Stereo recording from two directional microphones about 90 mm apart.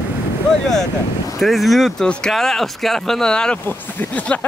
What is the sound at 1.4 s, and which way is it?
Speech, centre (ahead or behind).